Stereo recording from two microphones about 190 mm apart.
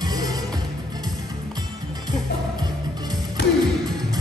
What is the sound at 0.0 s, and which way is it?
Music, 20° right (ahead or behind).